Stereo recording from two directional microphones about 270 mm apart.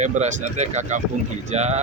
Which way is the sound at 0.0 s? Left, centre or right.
Right.